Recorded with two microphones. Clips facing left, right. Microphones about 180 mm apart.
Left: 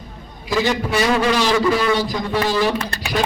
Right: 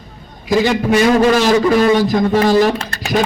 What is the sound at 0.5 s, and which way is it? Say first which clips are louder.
A man's voice: right 6 dB; 45° right (ahead or behind).